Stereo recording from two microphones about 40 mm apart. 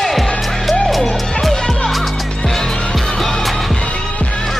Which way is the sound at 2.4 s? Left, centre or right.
Centre.